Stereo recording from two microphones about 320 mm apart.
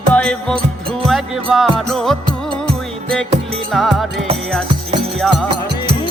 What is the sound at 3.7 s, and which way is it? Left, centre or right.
Music, centre.